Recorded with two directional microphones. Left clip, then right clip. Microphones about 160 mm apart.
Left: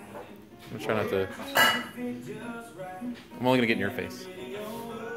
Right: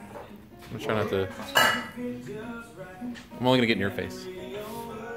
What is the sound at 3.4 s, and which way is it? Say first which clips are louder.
Speech: right 1 dB; 15° right (ahead or behind).